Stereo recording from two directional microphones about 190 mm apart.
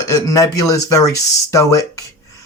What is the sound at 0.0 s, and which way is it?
Speech, 15° left (ahead or behind).